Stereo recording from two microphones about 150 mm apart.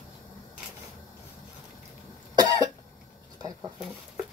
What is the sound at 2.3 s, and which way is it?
Cough, 25° right (ahead or behind).